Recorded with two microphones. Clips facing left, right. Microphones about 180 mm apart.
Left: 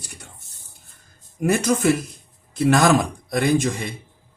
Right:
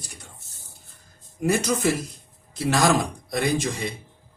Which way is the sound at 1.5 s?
55° left (ahead or behind).